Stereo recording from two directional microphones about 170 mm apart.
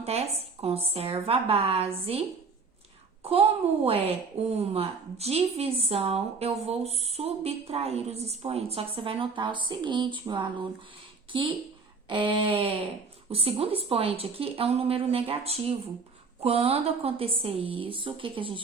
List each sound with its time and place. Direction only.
0.0 s a woman's voice: 40° right (ahead or behind)
3.8 s a woman's voice: 35° right (ahead or behind)
11.3 s a sound: 30° right (ahead or behind)
13.3 s a woman's voice: 35° right (ahead or behind)